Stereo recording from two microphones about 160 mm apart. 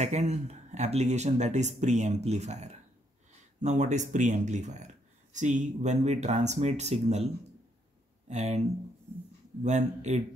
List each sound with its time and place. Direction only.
0.0 s speech: 45° right (ahead or behind)
8.3 s speech: 45° right (ahead or behind)